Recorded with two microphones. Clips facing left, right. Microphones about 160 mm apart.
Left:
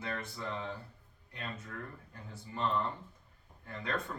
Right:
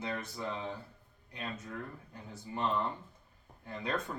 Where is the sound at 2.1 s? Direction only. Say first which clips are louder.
Right 3 dB; 20° right (ahead or behind).